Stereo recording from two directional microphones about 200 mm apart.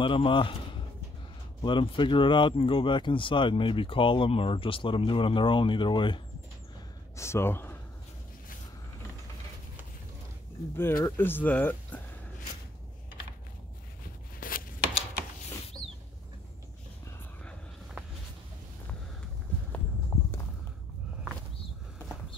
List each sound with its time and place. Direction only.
0.0 s speech: 25° left (ahead or behind)
1.6 s speech: 25° left (ahead or behind)
7.2 s speech: 15° left (ahead or behind)
10.8 s speech: 10° left (ahead or behind)
14.4 s a sound: 45° left (ahead or behind)